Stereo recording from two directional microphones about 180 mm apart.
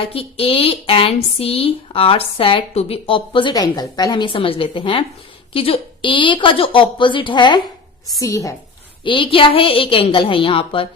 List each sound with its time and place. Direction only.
0.0 s a woman's voice: 30° left (ahead or behind)
9.0 s a woman's voice: 30° left (ahead or behind)